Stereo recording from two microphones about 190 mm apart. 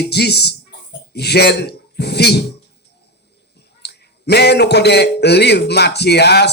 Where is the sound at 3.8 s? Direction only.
60° left (ahead or behind).